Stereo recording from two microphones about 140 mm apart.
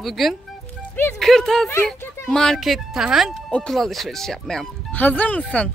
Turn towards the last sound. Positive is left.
turn(degrees=10)  # may be behind; listen again after turning